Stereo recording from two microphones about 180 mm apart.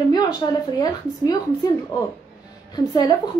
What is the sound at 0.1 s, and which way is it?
A woman's voice, 20° left (ahead or behind).